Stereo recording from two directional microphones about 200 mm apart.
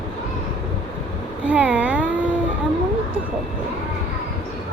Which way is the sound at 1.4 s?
5° right (ahead or behind).